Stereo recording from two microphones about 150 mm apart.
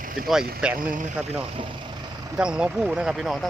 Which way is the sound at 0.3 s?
5° right (ahead or behind).